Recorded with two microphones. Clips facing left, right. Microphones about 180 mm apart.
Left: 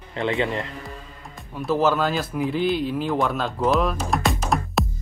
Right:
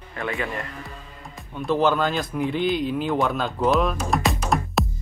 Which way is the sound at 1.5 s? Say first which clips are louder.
Even; 5° left (ahead or behind).